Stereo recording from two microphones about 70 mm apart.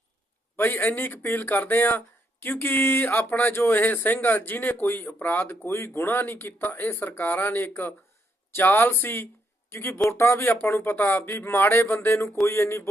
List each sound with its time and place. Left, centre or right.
0.5 s speech: left
5.7 s speech: left